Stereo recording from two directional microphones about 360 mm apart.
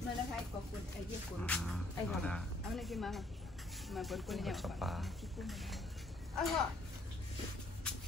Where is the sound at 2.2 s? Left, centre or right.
Centre.